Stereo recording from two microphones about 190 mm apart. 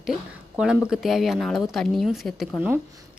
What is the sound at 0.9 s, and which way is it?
A woman's voice, centre (ahead or behind).